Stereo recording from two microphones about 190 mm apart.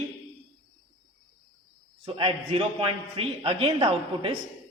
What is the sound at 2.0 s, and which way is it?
A man's voice, 30° right (ahead or behind).